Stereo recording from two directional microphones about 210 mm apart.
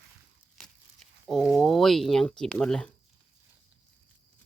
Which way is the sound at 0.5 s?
Centre (ahead or behind).